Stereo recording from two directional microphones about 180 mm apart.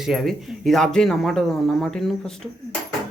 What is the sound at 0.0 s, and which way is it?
Speech, centre (ahead or behind).